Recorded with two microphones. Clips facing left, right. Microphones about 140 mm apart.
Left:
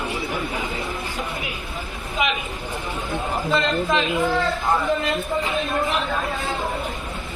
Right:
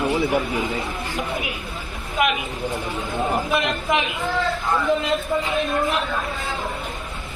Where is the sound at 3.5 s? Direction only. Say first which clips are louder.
Left 1 dB; 15° right (ahead or behind).